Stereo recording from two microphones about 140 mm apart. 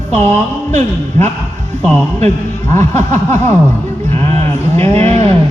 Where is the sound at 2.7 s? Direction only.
20° left (ahead or behind).